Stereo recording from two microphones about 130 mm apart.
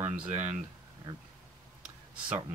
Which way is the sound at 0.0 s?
15° right (ahead or behind).